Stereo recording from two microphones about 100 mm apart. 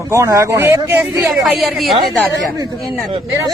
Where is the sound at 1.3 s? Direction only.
Centre (ahead or behind).